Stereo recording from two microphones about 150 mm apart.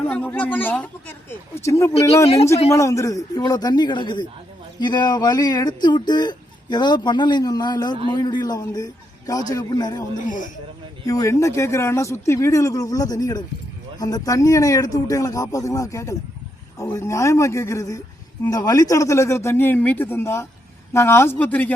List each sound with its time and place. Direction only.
0.1 s speech: 10° left (ahead or behind)
2.2 s a man's voice: 40° left (ahead or behind)
2.7 s speech: 20° left (ahead or behind)
10.2 s speech: 60° left (ahead or behind)
11.0 s speech: 20° left (ahead or behind)